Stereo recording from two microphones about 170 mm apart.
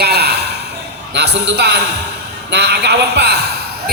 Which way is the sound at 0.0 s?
70° right (ahead or behind).